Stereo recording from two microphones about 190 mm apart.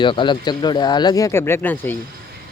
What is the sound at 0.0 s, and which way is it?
Speech, 25° left (ahead or behind).